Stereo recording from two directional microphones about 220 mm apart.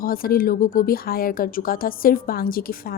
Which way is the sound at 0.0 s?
40° left (ahead or behind).